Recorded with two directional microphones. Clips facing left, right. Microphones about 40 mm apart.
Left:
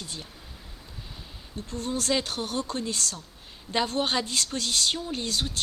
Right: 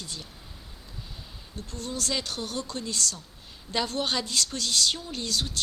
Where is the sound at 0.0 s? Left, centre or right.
Left.